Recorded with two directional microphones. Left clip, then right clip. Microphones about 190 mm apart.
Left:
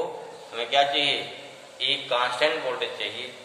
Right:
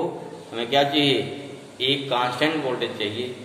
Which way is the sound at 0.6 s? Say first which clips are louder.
Right 2 dB; 20° right (ahead or behind).